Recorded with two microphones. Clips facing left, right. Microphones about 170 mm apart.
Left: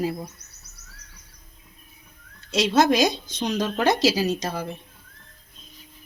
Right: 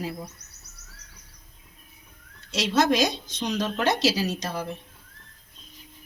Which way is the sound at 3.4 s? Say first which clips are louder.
Left 1 dB; 30° left (ahead or behind).